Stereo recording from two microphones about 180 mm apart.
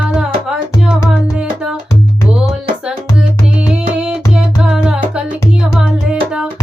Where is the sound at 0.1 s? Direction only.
5° right (ahead or behind).